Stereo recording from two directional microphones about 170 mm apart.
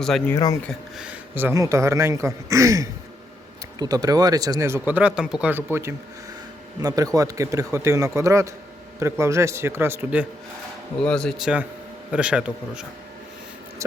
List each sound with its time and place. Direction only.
0.3 s speech: 20° left (ahead or behind)
0.7 s a man's voice: 5° right (ahead or behind)
11.0 s a man's voice: 5° left (ahead or behind)